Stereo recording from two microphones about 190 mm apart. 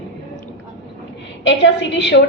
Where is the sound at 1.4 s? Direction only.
70° left (ahead or behind).